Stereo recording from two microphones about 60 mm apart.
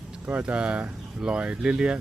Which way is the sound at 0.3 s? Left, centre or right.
Centre.